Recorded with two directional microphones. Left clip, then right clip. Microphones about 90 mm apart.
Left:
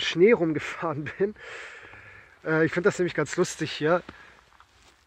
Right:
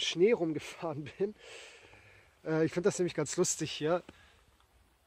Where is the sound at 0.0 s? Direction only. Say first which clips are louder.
Left 8 dB; 50° right (ahead or behind); by 3.5 s 75° right (ahead or behind).